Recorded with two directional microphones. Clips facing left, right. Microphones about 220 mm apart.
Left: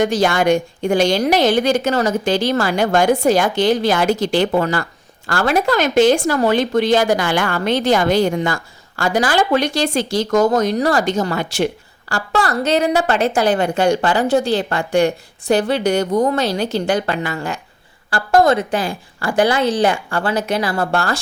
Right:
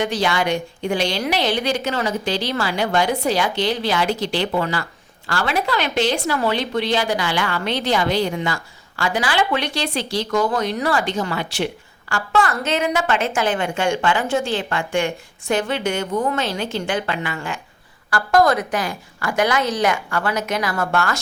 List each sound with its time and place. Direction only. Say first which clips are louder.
0.0 s a woman's voice: left 5 dB; 45° left (ahead or behind)
18.1 s a woman's voice: left 3 dB; 25° left (ahead or behind)